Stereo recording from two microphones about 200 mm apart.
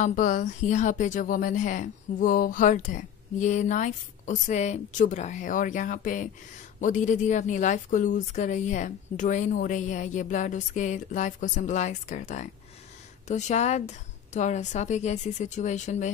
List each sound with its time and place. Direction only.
0.0 s a woman's voice: 40° left (ahead or behind)